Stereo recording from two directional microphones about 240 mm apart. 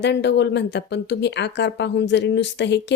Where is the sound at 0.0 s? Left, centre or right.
Left.